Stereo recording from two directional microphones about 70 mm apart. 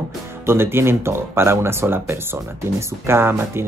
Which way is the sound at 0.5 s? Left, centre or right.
Right.